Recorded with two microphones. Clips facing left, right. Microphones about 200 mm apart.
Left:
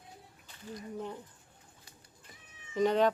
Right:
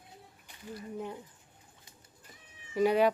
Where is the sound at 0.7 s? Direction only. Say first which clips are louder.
Right 1 dB; 10° right (ahead or behind).